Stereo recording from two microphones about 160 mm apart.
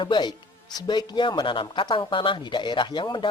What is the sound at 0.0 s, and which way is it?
A man's voice, 25° left (ahead or behind).